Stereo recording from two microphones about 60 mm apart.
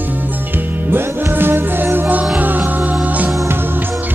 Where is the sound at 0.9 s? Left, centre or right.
Right.